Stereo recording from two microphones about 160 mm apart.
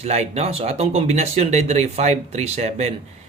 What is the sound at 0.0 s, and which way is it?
Speech, 40° right (ahead or behind).